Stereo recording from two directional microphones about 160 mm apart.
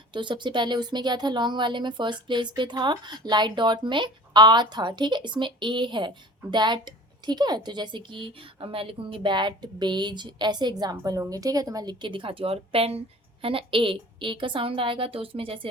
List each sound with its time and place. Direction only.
0.1 s a woman's voice: 30° right (ahead or behind)